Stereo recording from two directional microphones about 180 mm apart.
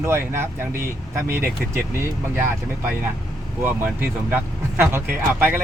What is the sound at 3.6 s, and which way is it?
Speech, 10° right (ahead or behind).